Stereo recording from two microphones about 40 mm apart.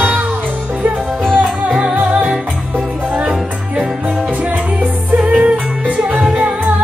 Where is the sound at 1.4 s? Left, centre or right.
Right.